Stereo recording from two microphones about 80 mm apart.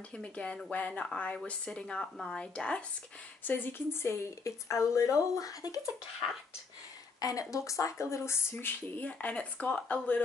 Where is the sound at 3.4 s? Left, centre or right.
Left.